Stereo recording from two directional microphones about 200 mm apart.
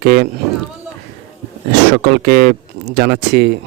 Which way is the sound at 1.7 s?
50° right (ahead or behind).